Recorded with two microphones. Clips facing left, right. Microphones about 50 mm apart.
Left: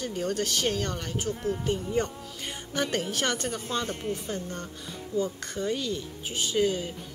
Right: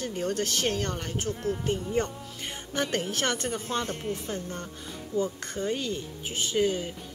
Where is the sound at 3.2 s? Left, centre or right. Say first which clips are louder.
Even; centre.